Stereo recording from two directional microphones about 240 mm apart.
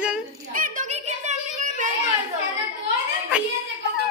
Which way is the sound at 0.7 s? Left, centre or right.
Right.